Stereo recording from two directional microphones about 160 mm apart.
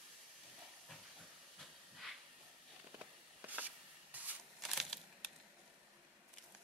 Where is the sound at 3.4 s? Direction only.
10° right (ahead or behind).